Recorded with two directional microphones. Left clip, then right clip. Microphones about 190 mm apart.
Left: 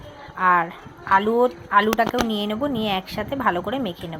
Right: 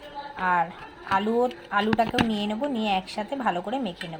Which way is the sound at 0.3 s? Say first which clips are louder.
Left 6 dB; 20° left (ahead or behind).